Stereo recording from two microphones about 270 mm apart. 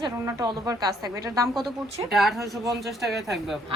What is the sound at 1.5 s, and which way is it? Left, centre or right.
Speech, centre.